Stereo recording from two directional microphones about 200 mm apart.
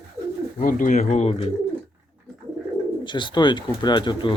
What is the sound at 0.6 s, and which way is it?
Speech, 40° left (ahead or behind).